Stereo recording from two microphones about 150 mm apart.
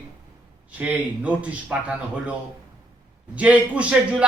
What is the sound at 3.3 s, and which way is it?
Speech, 10° right (ahead or behind).